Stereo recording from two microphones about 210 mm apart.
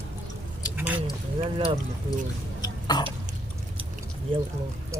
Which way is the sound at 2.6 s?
20° left (ahead or behind).